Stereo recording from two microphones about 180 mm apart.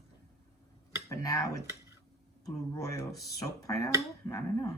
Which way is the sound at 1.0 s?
20° left (ahead or behind).